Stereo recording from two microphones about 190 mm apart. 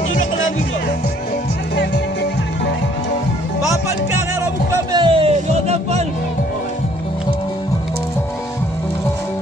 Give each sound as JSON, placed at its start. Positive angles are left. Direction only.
{"t": 4.9, "sound": "music", "side_deg": -25}